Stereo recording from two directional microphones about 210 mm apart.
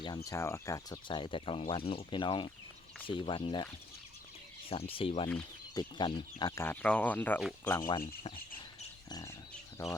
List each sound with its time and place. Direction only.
0.3 s speech: 15° left (ahead or behind)
4.7 s speech: 25° left (ahead or behind)
9.0 s a sound: 15° left (ahead or behind)
9.8 s speech: 10° left (ahead or behind)